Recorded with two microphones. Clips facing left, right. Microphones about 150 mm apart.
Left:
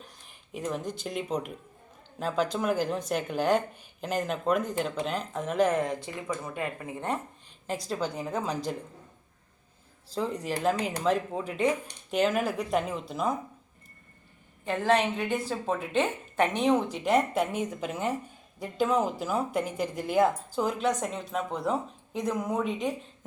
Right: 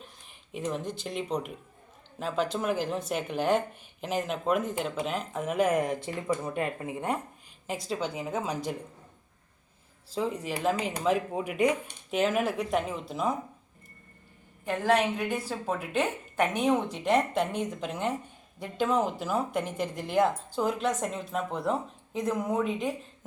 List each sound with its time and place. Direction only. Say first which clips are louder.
0.3 s a sound: even; centre (ahead or behind)
0.9 s a woman's voice: even; centre (ahead or behind)
5.7 s speech: right 1 dB; 20° right (ahead or behind)
6.2 s speech: right 4 dB; 30° right (ahead or behind)
7.7 s a woman's voice: left 1 dB; centre (ahead or behind)
10.2 s a woman's voice: even; 5° right (ahead or behind)
14.6 s a woman's voice: even; 10° right (ahead or behind)